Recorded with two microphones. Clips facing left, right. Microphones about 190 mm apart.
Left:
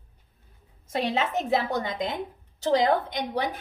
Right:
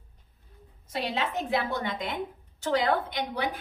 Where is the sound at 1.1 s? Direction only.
45° left (ahead or behind).